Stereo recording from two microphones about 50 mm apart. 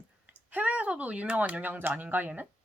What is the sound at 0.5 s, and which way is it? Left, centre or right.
Speech, right.